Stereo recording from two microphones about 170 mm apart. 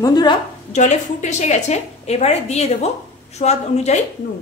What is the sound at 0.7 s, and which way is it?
A woman's voice, 45° left (ahead or behind).